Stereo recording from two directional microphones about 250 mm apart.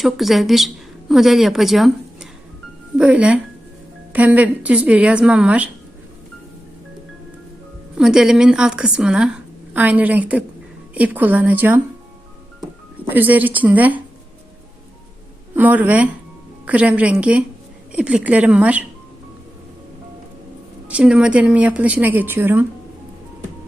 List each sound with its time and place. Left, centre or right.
0.0 s a woman's voice: centre
7.9 s a woman's voice: centre
13.1 s a woman's voice: centre
15.5 s a woman's voice: centre
20.8 s a woman's voice: centre